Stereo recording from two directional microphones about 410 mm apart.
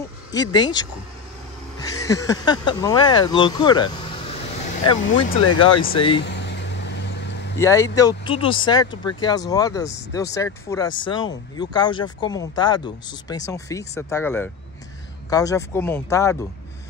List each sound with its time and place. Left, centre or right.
0.3 s speech: centre
6.2 s vehicle: left
7.5 s speech: centre